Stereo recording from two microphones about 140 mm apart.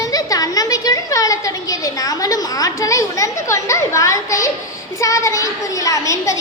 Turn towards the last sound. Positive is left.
turn(degrees=25)  # may be behind; listen again after turning